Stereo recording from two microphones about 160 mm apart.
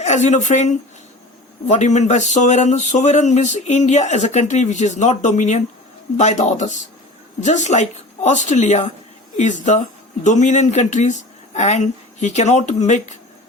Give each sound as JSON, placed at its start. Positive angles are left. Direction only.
{"t": 0.0, "sound": "speech", "side_deg": 45}